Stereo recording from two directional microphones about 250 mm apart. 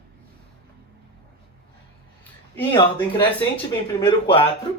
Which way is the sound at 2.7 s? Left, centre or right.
Centre.